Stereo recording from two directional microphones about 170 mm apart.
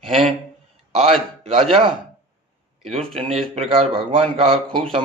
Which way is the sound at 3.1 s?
35° right (ahead or behind).